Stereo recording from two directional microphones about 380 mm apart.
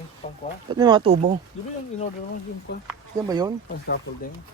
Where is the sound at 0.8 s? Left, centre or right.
Centre.